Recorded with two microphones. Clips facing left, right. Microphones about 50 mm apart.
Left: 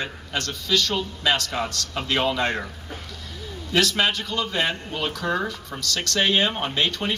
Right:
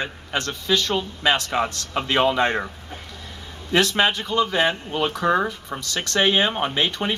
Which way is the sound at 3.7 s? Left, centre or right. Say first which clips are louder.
Right 2 dB; right.